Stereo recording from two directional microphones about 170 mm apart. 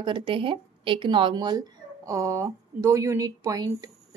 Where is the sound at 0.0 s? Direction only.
30° right (ahead or behind).